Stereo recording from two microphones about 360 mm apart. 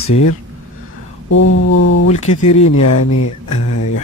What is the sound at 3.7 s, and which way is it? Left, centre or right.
Mantra, left.